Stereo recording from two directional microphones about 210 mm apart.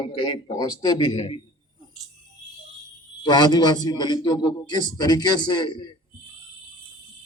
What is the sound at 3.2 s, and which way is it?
A man's voice, 20° left (ahead or behind).